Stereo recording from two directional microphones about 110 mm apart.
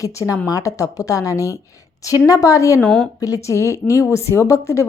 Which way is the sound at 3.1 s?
30° left (ahead or behind).